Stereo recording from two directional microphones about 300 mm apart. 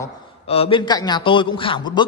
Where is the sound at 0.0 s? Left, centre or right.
Centre.